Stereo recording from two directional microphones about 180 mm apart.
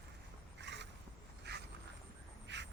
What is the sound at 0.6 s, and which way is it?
Vehicle, 75° right (ahead or behind).